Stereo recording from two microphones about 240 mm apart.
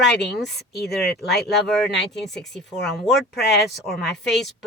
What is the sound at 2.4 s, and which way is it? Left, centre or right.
Speech, centre.